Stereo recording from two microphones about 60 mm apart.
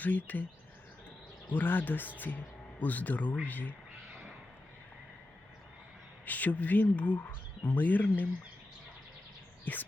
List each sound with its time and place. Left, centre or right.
0.0 s speech: left
1.5 s speech: left
6.2 s speech: left